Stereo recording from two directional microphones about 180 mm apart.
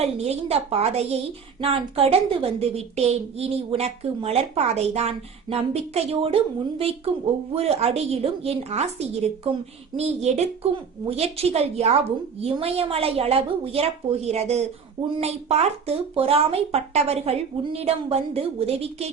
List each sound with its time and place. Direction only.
0.0 s a woman's voice: 35° right (ahead or behind)